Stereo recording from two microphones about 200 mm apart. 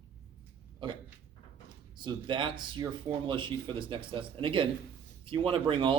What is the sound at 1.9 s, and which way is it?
Speech, 25° right (ahead or behind).